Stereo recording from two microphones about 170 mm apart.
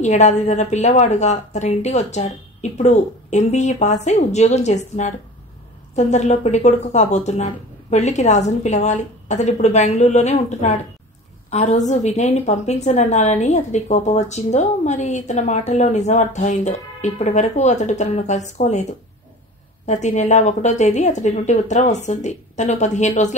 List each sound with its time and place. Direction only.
0.0 s a woman's voice: 45° left (ahead or behind)
19.9 s a woman's voice: 45° left (ahead or behind)